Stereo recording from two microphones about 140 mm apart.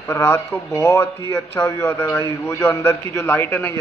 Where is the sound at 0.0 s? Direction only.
15° left (ahead or behind).